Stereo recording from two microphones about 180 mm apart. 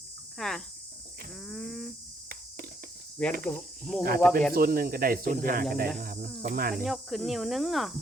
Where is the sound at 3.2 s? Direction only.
5° left (ahead or behind).